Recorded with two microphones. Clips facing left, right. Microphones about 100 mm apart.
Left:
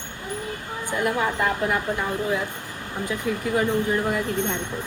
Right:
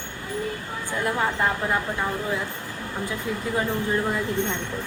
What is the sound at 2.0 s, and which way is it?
Speech, 15° left (ahead or behind).